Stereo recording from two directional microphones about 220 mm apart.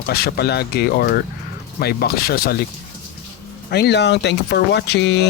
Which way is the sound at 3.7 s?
50° left (ahead or behind).